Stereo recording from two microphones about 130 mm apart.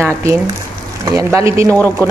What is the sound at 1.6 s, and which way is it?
Speech, 15° left (ahead or behind).